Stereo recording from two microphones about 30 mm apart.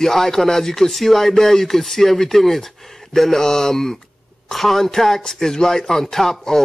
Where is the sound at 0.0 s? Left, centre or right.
Centre.